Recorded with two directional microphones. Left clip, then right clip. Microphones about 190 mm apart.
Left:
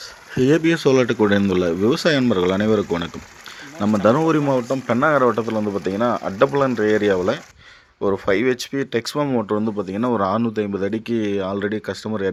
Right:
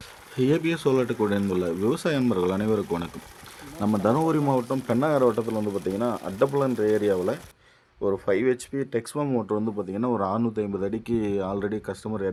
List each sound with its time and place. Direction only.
0.4 s speech: 25° left (ahead or behind); by 9.4 s 10° left (ahead or behind)
9.4 s speech: 20° left (ahead or behind)